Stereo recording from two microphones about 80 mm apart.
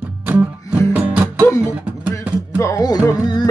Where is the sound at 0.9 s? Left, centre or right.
Centre.